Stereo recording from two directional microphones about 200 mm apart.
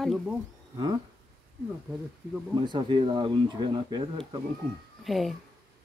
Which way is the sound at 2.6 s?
25° right (ahead or behind).